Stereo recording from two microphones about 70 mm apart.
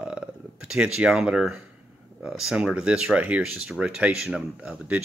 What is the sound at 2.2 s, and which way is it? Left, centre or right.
Speech, centre.